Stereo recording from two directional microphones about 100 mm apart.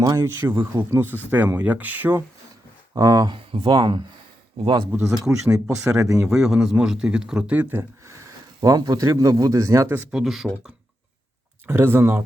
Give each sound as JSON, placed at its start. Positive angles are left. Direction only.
{"t": 0.0, "sound": "a man's voice", "side_deg": -35}
{"t": 2.9, "sound": "a man's voice", "side_deg": -40}
{"t": 3.3, "sound": "speech", "side_deg": -55}
{"t": 5.2, "sound": "speech", "side_deg": -10}
{"t": 8.6, "sound": "a man's voice", "side_deg": -35}
{"t": 10.1, "sound": "speech", "side_deg": -5}
{"t": 11.6, "sound": "speech", "side_deg": -25}